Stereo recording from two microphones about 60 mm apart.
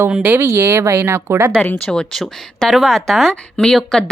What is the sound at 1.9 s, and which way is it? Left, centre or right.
Speech, centre.